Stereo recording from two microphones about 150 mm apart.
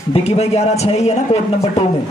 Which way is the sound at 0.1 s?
45° left (ahead or behind).